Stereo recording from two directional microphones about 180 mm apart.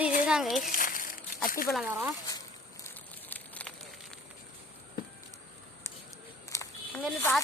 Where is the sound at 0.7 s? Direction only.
50° left (ahead or behind).